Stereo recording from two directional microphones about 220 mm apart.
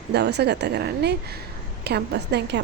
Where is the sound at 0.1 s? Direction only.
50° right (ahead or behind).